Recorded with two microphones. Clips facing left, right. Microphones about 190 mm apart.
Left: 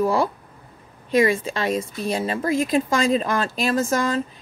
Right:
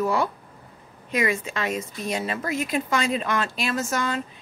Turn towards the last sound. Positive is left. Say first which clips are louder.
# left 5 dB
turn(degrees=35)  # may be behind; listen again after turning